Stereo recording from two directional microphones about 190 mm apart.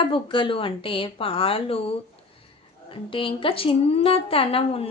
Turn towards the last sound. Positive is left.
turn(degrees=30)  # may be behind; listen again after turning